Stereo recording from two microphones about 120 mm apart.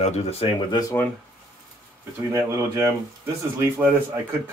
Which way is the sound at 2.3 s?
25° right (ahead or behind).